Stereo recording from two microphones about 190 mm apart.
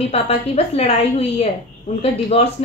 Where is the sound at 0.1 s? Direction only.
30° left (ahead or behind).